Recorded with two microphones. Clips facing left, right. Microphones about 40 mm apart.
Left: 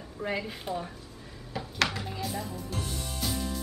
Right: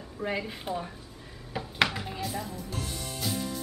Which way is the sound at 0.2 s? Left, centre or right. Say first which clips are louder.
Right 1 dB; centre.